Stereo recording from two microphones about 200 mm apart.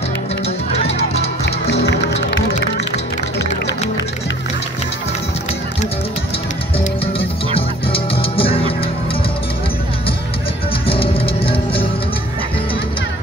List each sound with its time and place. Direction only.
0.8 s music: 30° left (ahead or behind)
6.8 s music: 25° left (ahead or behind)
10.9 s music: 30° left (ahead or behind)